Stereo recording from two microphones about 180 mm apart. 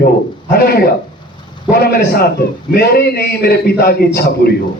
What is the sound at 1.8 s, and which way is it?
A man's voice, 60° left (ahead or behind).